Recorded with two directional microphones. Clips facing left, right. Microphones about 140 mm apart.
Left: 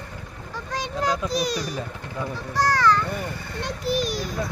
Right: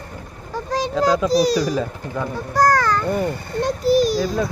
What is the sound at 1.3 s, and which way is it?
Speech, 35° right (ahead or behind).